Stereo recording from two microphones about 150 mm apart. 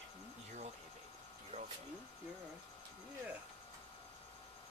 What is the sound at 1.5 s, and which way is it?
Speech, 50° right (ahead or behind).